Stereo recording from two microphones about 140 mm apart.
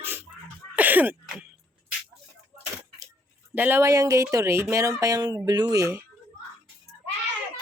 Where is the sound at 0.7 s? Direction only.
10° right (ahead or behind).